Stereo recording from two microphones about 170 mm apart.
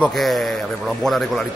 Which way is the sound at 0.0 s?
Centre (ahead or behind).